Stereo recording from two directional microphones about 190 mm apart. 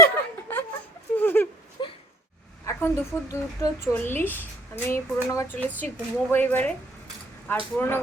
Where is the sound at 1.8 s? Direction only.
25° left (ahead or behind).